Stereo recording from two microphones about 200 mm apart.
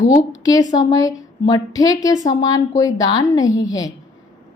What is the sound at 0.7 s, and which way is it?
A woman's voice, 20° left (ahead or behind).